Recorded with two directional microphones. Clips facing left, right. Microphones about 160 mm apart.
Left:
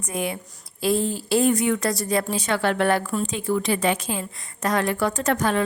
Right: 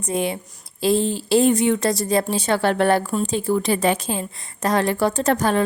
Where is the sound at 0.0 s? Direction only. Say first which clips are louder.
Right 4 dB; 25° right (ahead or behind).